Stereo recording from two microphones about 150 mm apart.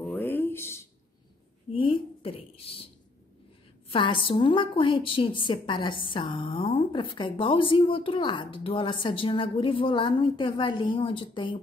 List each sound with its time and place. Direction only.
0.1 s a sound: 15° left (ahead or behind)
1.7 s a woman's voice: 35° left (ahead or behind)
3.9 s a woman's voice: 35° left (ahead or behind)